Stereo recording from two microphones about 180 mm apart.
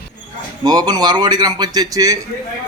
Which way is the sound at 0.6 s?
20° right (ahead or behind).